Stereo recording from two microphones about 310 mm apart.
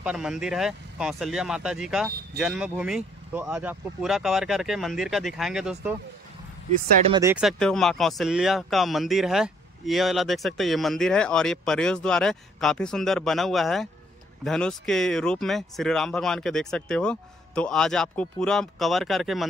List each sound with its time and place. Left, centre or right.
0.0 s speech: centre
7.1 s speech: centre